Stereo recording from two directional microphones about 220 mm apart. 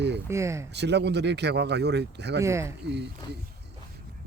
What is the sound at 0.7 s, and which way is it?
Speech, 50° right (ahead or behind).